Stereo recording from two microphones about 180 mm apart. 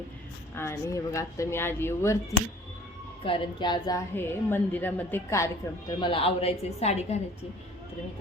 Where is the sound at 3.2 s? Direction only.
30° left (ahead or behind).